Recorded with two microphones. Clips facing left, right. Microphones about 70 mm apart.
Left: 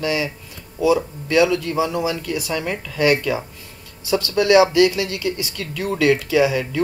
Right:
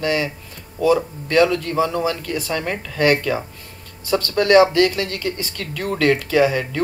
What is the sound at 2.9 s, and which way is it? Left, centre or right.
Speech, right.